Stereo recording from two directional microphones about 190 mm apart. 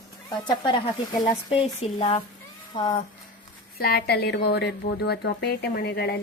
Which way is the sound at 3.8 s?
55° left (ahead or behind).